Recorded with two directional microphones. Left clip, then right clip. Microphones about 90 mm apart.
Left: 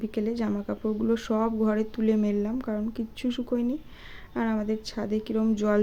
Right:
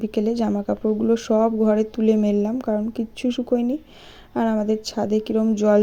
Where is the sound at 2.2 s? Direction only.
45° right (ahead or behind).